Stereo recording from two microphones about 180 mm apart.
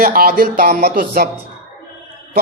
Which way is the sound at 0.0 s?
55° right (ahead or behind).